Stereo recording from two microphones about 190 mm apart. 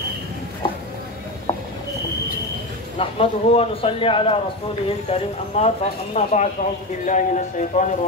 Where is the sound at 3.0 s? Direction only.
30° left (ahead or behind).